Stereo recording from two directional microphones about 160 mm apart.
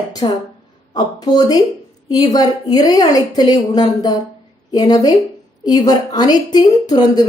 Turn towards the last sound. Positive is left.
turn(degrees=25)  # may be behind; listen again after turning